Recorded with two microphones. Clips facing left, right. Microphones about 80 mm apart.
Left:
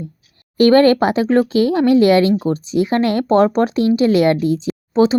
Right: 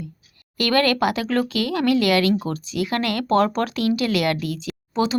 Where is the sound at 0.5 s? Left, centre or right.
Left.